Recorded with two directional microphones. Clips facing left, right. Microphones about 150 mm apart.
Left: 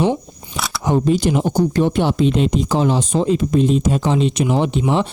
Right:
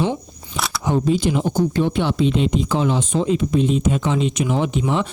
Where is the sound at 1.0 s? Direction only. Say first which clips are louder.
Left 1 dB; 70° left (ahead or behind).